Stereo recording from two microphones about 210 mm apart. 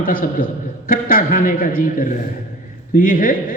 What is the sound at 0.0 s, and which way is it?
A man's voice, 40° left (ahead or behind).